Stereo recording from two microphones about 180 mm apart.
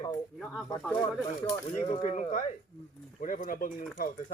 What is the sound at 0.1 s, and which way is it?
Speech, centre (ahead or behind).